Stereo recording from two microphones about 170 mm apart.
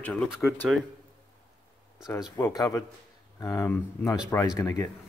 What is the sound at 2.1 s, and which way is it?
Speech, 20° left (ahead or behind).